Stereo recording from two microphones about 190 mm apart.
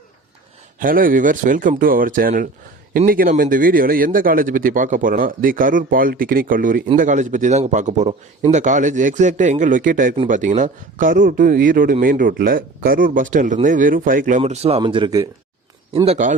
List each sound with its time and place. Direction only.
0.8 s a man's voice: 45° right (ahead or behind); by 15.3 s 20° right (ahead or behind)
16.0 s a man's voice: 40° right (ahead or behind)